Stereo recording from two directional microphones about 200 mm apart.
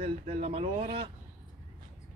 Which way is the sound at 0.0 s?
30° right (ahead or behind).